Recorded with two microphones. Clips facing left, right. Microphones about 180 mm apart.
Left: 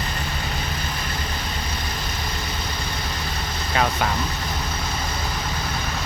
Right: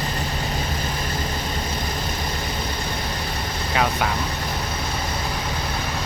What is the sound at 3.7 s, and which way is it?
Speech, 5° right (ahead or behind).